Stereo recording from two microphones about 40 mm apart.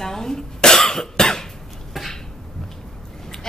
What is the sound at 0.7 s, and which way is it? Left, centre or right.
Cough, centre.